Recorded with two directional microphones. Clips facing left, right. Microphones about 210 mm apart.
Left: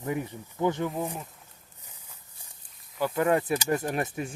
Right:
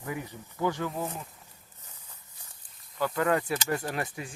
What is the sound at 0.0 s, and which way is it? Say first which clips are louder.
Speech: left 5 dB; 25° left (ahead or behind).